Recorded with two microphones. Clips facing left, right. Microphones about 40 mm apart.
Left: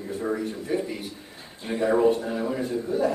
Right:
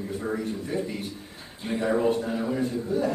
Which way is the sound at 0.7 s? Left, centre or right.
Centre.